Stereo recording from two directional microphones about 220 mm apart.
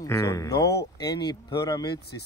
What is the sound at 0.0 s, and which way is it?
Speech, 15° left (ahead or behind).